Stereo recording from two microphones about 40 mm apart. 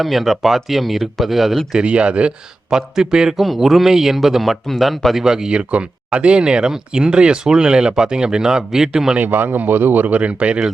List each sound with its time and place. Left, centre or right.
0.0 s speech: centre
1.7 s a man's voice: right
3.4 s a man's voice: centre
5.2 s a man's voice: centre
5.5 s speech: right
9.1 s speech: right
10.2 s speech: right